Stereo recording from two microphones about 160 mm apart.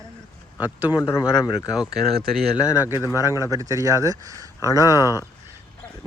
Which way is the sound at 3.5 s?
20° right (ahead or behind).